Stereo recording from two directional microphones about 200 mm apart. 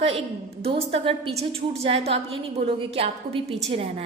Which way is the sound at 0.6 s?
30° right (ahead or behind).